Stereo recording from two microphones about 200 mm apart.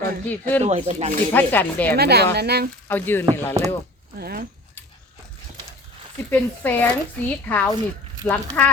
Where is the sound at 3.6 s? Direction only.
15° right (ahead or behind).